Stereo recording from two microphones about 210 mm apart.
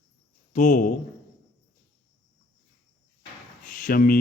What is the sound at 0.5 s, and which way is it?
Speech, 40° left (ahead or behind).